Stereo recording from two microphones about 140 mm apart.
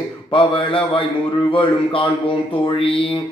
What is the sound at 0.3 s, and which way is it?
Mantra, 35° left (ahead or behind).